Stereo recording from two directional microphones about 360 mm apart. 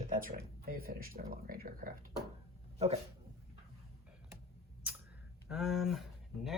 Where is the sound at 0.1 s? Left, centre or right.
Right.